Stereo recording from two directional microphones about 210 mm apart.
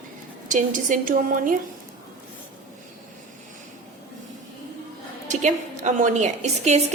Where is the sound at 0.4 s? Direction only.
40° right (ahead or behind).